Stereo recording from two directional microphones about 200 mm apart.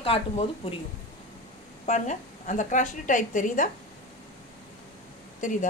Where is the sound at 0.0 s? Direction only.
30° left (ahead or behind).